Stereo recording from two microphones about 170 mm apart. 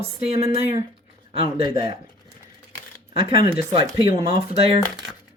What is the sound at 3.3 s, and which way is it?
Speech, 25° right (ahead or behind).